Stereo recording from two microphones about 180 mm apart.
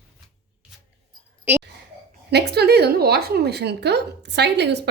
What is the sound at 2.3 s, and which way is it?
A woman's voice, 65° right (ahead or behind).